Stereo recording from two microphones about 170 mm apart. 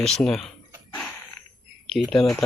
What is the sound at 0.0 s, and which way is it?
Speech, centre (ahead or behind).